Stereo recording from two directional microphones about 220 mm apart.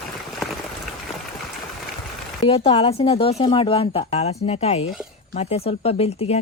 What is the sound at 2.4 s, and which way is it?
Speech, 25° left (ahead or behind).